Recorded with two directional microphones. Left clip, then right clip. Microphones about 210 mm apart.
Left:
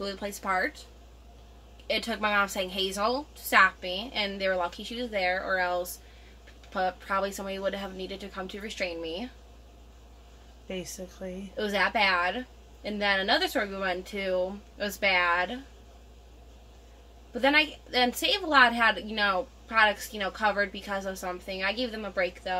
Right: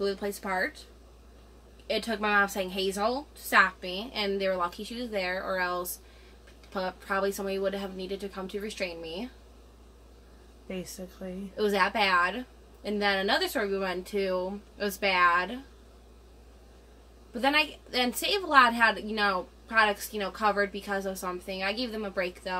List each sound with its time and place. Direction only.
0.0 s a woman's voice: 15° right (ahead or behind)
1.9 s a woman's voice: 15° right (ahead or behind)
11.2 s a woman's voice: 10° left (ahead or behind)
11.5 s a woman's voice: 15° right (ahead or behind)
17.3 s a woman's voice: 20° right (ahead or behind)